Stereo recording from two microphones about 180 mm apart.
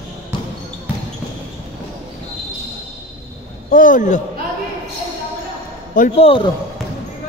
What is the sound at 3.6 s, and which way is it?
Speech, 50° left (ahead or behind).